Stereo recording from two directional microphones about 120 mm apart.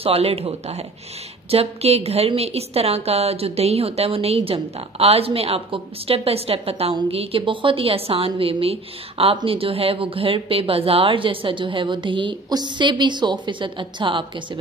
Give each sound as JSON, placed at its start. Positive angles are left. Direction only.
{"t": 0.0, "sound": "a woman's voice", "side_deg": -55}